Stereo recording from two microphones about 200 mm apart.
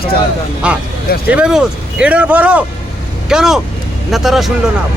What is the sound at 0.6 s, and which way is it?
A man's voice, 5° right (ahead or behind).